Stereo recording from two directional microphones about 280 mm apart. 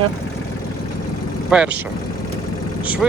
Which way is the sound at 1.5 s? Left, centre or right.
Centre.